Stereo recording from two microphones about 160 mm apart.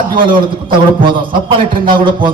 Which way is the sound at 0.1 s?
30° right (ahead or behind).